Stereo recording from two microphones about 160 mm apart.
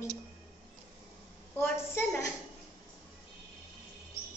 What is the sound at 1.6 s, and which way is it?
Speech, 15° left (ahead or behind).